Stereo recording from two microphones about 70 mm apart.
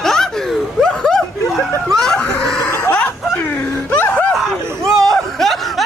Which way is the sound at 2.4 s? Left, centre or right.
Centre.